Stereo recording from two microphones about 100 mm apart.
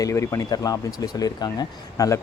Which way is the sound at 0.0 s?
30° left (ahead or behind).